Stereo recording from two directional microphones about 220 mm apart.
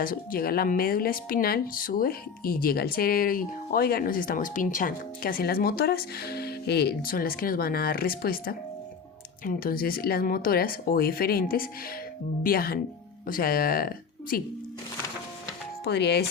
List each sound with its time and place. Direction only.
0.0 s speech: 40° left (ahead or behind)
15.8 s speech: 50° left (ahead or behind)